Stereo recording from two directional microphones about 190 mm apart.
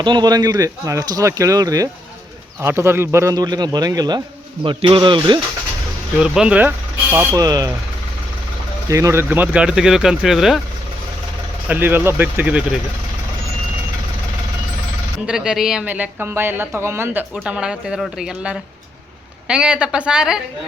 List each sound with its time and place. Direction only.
0.0 s speech: 25° right (ahead or behind)
6.1 s speech: 5° right (ahead or behind); by 7.7 s 20° right (ahead or behind)
8.9 s speech: 15° right (ahead or behind)
11.7 s speech: 10° right (ahead or behind)
15.3 s speech: 5° right (ahead or behind)